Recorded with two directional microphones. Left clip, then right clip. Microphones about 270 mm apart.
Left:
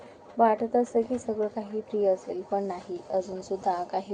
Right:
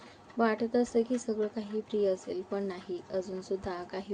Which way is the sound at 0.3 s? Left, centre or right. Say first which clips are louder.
Left 6 dB; centre.